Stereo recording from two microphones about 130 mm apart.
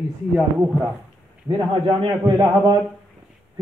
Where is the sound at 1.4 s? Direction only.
35° right (ahead or behind).